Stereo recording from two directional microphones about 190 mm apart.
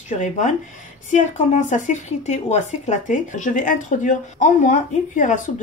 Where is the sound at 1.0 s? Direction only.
40° left (ahead or behind).